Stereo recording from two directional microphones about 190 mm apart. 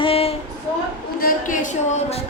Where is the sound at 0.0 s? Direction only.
30° left (ahead or behind).